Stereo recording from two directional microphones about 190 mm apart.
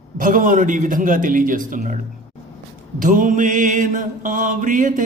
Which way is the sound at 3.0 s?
45° right (ahead or behind).